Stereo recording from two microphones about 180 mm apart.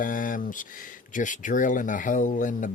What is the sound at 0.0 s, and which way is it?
Speech, 50° left (ahead or behind).